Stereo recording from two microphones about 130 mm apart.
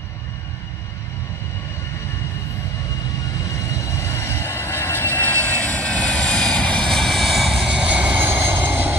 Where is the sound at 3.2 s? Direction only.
25° left (ahead or behind); by 7.9 s 5° right (ahead or behind).